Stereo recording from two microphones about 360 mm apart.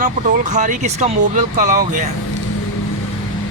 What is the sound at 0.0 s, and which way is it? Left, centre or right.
Speech, right.